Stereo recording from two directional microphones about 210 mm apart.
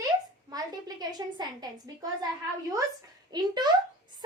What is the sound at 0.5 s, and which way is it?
Speech, 20° right (ahead or behind).